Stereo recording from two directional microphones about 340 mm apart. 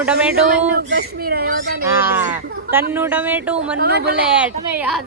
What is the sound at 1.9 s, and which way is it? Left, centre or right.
Speech, centre.